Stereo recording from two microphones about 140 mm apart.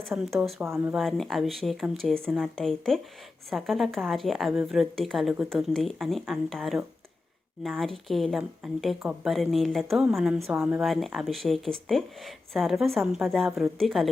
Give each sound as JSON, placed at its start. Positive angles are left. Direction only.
{"t": 0.0, "sound": "a woman's voice", "side_deg": 0}
{"t": 0.6, "sound": "speech", "side_deg": -20}
{"t": 0.9, "sound": "a woman's voice", "side_deg": 0}
{"t": 10.8, "sound": "a woman's voice", "side_deg": 0}